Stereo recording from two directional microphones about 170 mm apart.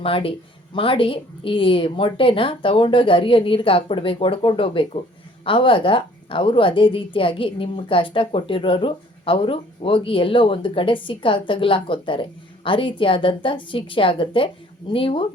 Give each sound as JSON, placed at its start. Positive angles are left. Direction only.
{"t": 0.0, "sound": "a woman's voice", "side_deg": 30}